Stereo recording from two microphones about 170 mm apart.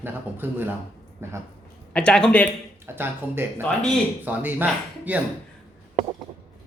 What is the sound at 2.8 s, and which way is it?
A man's voice, 15° right (ahead or behind).